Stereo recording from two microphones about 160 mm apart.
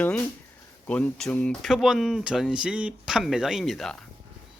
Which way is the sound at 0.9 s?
10° left (ahead or behind).